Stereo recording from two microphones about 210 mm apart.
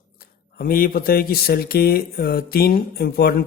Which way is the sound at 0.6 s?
45° left (ahead or behind).